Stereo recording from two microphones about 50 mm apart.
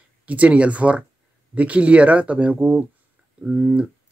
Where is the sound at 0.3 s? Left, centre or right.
Right.